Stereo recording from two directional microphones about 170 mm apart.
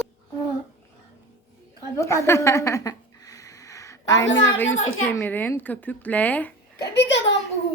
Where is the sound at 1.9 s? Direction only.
15° left (ahead or behind).